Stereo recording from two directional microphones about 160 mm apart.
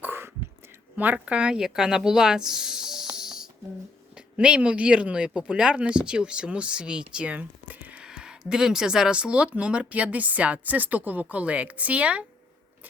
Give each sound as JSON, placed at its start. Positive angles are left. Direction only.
{"t": 0.0, "sound": "whispering", "side_deg": -15}
{"t": 0.9, "sound": "speech", "side_deg": -10}